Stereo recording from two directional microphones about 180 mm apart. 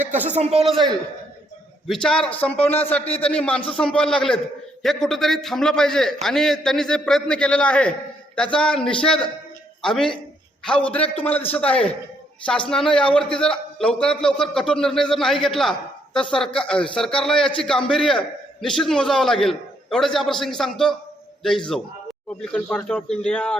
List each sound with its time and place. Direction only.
0.0 s a sound: 10° right (ahead or behind)
0.3 s a man's voice: 40° right (ahead or behind)
0.7 s a man's voice: 25° right (ahead or behind)
1.9 s a man's voice: 5° left (ahead or behind)
22.4 s a man's voice: 5° left (ahead or behind)